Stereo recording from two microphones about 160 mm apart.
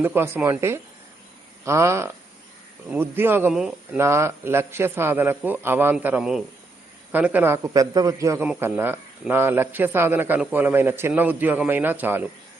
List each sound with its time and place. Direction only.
0.0 s speech: 15° right (ahead or behind)
3.5 s speech: 5° right (ahead or behind)
3.9 s speech: 15° right (ahead or behind)